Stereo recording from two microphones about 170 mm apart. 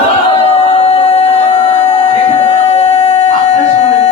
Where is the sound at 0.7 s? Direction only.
40° left (ahead or behind).